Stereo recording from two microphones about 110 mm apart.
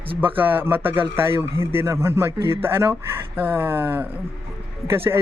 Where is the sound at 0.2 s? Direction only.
15° right (ahead or behind).